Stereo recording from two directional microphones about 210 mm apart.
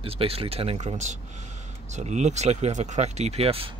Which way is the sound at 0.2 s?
25° right (ahead or behind).